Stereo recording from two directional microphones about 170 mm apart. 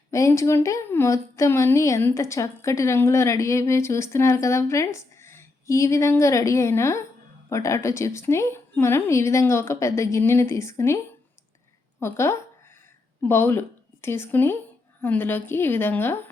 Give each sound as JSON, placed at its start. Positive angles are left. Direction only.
{"t": 0.1, "sound": "a woman's voice", "side_deg": 15}